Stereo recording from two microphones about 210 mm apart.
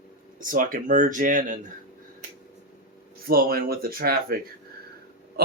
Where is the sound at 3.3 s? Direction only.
45° right (ahead or behind).